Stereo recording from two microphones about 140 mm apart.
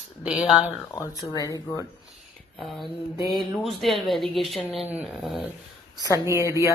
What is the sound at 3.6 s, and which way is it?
Speech, centre (ahead or behind).